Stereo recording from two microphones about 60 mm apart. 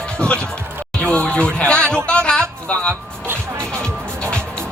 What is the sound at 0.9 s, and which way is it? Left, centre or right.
Speech, centre.